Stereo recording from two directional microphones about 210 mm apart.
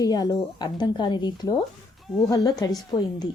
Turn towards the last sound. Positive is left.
turn(degrees=20)  # may be behind; listen again after turning